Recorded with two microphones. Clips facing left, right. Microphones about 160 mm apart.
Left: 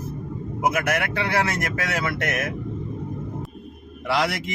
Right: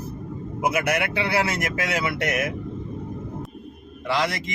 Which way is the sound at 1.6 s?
15° right (ahead or behind).